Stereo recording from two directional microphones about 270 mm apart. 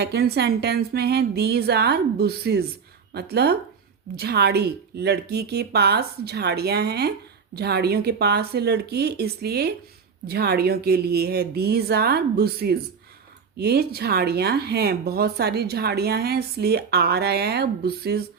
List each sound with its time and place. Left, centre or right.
0.0 s speech: right